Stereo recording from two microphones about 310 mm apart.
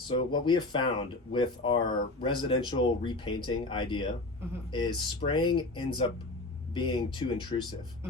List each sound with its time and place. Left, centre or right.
0.1 s speech: centre